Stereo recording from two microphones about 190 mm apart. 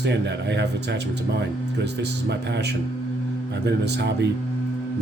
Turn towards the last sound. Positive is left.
turn(degrees=-65)  # may be behind; listen again after turning